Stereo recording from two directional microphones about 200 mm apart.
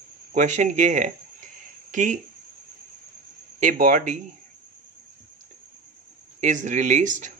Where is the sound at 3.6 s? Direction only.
40° right (ahead or behind).